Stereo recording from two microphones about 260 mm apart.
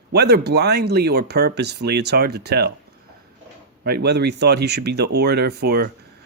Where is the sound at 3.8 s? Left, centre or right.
Right.